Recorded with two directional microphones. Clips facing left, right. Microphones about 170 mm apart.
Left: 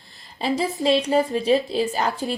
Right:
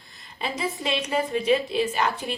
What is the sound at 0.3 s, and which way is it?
A woman's voice, 30° left (ahead or behind).